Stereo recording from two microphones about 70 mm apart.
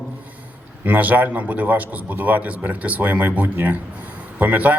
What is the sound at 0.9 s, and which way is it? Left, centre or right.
A man's voice, right.